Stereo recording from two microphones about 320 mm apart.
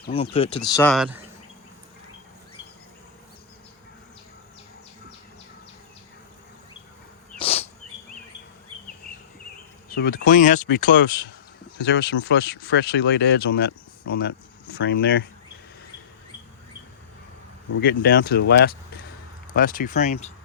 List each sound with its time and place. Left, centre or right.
0.1 s speech: centre
0.7 s speech: centre
7.3 s insect: centre
9.9 s speech: left
17.7 s speech: left